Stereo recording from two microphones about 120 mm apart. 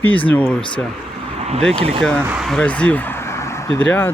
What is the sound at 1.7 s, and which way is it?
Speech, 50° right (ahead or behind).